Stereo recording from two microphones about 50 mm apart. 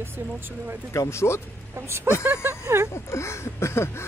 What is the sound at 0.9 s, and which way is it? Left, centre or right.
Speech, left.